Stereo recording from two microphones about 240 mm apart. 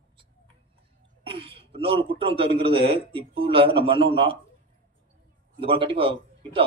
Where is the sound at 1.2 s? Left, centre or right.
Right.